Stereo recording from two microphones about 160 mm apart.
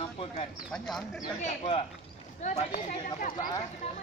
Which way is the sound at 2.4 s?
50° left (ahead or behind).